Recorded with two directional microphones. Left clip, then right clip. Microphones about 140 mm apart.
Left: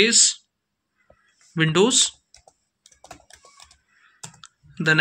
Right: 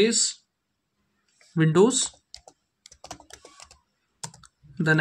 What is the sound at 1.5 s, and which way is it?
Speech, 45° right (ahead or behind).